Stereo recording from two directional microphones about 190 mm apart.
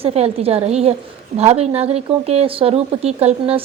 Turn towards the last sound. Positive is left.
turn(degrees=-30)  # may be behind; listen again after turning